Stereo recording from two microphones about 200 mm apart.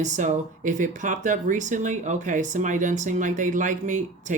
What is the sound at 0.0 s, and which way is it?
Speech, 40° right (ahead or behind).